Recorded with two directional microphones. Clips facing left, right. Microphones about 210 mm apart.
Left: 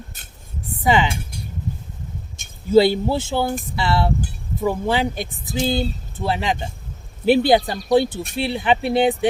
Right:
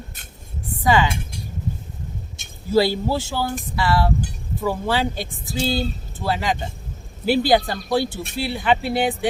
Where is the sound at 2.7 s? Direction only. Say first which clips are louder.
Left 4 dB; 20° left (ahead or behind).